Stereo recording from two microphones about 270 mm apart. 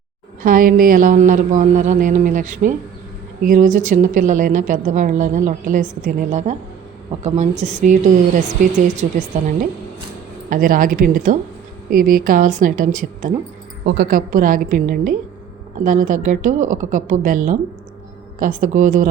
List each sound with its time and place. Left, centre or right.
0.4 s a woman's voice: right